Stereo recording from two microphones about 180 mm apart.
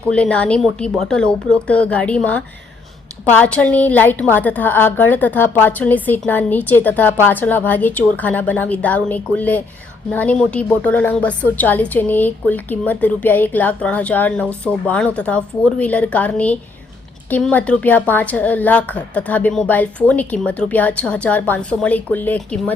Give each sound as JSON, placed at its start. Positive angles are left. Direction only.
{"t": 0.1, "sound": "a woman's voice", "side_deg": 5}